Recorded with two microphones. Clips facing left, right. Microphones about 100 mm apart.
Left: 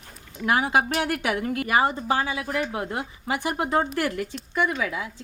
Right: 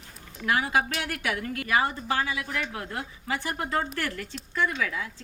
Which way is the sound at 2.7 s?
20° left (ahead or behind).